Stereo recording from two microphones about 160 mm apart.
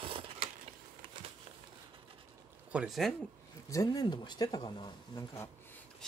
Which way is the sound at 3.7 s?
20° left (ahead or behind).